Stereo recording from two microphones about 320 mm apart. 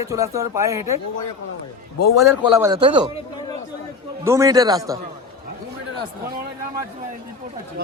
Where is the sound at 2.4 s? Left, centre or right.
Centre.